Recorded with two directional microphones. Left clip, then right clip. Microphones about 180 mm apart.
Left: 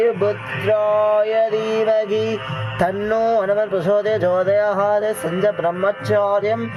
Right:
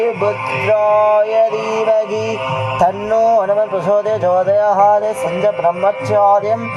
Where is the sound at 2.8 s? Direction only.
70° left (ahead or behind).